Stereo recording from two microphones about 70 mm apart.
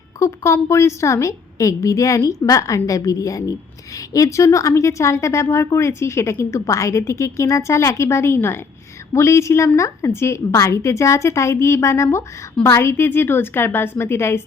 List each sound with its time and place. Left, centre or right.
0.2 s a woman's voice: left